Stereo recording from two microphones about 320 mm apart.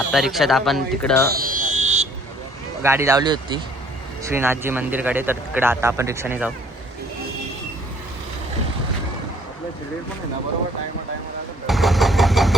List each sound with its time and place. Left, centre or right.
0.1 s speech: centre
1.3 s vehicle: right
2.8 s speech: centre
11.6 s engine starting: centre